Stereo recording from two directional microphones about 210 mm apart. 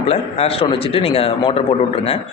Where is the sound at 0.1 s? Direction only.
30° left (ahead or behind).